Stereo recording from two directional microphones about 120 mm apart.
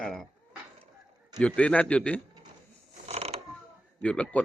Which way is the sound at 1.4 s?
10° left (ahead or behind).